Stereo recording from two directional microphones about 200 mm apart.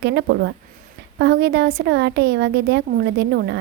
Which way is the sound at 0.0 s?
55° right (ahead or behind).